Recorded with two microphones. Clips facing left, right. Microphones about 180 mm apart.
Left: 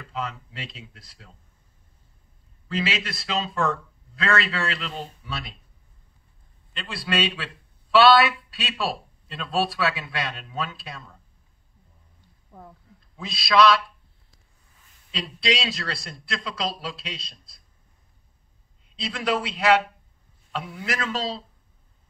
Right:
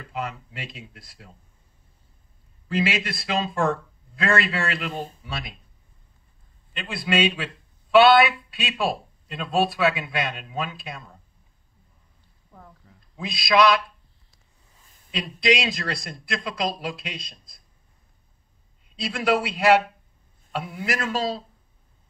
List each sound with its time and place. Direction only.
0.1 s a man's voice: 15° right (ahead or behind)
2.7 s a man's voice: 15° right (ahead or behind)
6.7 s a man's voice: 15° right (ahead or behind)
13.1 s a man's voice: 15° right (ahead or behind)
15.0 s a man's voice: 15° right (ahead or behind)
19.0 s a man's voice: 10° right (ahead or behind)